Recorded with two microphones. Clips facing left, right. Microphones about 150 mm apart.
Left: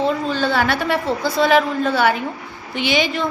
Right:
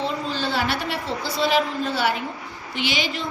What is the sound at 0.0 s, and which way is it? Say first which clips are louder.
A woman's voice: left 6 dB; 55° left (ahead or behind).